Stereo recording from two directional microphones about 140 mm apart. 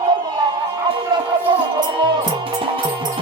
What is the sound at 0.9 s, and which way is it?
Music, 35° right (ahead or behind).